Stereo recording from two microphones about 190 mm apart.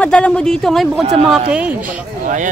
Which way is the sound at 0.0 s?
5° left (ahead or behind).